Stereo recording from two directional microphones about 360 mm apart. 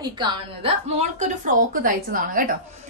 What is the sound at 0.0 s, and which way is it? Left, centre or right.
A woman's voice, centre.